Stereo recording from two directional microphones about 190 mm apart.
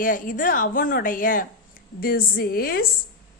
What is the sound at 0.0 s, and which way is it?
A woman's voice, 45° left (ahead or behind).